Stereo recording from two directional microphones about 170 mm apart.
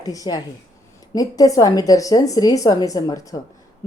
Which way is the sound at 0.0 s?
20° left (ahead or behind).